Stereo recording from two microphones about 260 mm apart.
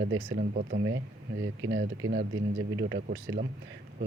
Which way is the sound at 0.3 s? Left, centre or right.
Right.